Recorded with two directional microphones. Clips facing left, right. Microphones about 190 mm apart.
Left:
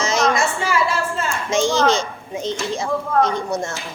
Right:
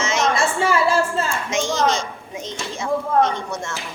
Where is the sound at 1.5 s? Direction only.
30° left (ahead or behind).